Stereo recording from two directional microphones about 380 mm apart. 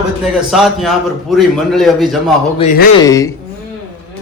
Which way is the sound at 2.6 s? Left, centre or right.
Left.